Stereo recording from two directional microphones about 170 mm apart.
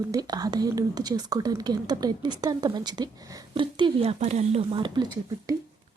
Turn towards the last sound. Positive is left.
turn(degrees=-25)  # may be behind; listen again after turning